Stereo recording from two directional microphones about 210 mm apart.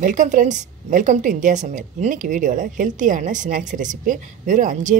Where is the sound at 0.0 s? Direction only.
35° right (ahead or behind).